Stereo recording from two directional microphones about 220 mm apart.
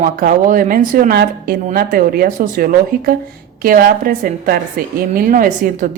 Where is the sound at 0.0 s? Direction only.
40° right (ahead or behind).